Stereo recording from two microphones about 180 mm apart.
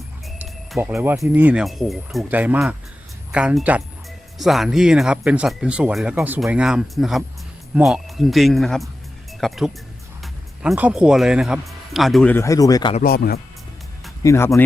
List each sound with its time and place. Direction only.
0.3 s music: centre (ahead or behind)
0.8 s speech: 10° right (ahead or behind)
12.3 s speech: 15° left (ahead or behind)
13.0 s speech: 55° left (ahead or behind)
14.2 s speech: 15° left (ahead or behind)